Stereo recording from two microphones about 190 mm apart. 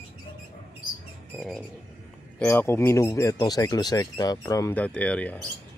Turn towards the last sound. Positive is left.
turn(degrees=10)  # may be behind; listen again after turning